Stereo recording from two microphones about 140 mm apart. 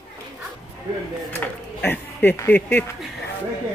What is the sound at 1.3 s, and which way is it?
Speech, 15° left (ahead or behind).